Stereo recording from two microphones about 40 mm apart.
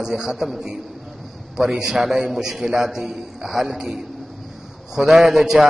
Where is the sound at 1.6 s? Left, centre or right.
Centre.